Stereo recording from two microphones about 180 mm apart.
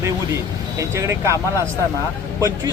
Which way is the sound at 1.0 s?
15° right (ahead or behind).